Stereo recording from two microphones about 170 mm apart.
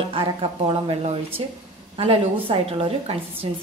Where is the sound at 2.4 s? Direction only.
30° right (ahead or behind).